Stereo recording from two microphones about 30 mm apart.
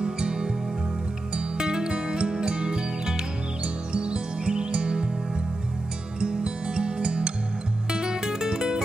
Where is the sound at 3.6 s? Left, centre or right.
Right.